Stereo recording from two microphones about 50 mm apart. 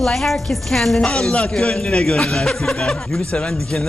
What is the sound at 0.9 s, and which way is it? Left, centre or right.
Speech, centre.